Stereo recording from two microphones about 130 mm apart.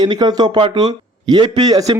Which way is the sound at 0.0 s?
30° right (ahead or behind).